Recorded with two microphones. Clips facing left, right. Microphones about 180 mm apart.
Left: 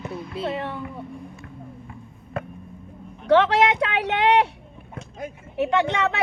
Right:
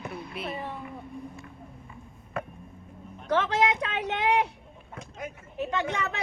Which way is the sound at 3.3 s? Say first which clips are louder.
Left 7 dB; 75° left (ahead or behind).